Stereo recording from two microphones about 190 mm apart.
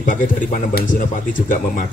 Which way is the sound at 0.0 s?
45° left (ahead or behind).